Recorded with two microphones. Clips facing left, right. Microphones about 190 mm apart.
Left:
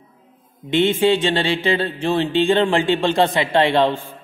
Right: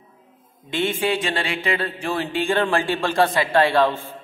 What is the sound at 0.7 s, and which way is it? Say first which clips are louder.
Mantra: left 6 dB; 25° left (ahead or behind).